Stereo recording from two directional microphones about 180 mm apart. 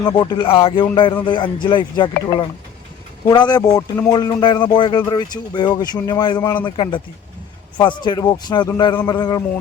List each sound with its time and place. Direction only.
0.0 s speech: 25° left (ahead or behind)
3.2 s speech: 20° left (ahead or behind)